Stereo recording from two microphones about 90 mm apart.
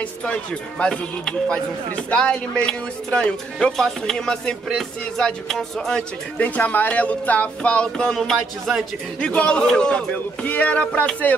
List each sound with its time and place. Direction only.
0.2 s speech: 10° left (ahead or behind)